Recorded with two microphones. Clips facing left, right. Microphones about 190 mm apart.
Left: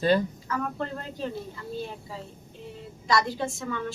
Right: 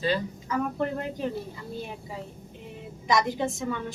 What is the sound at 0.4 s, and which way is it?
Speech, 15° right (ahead or behind).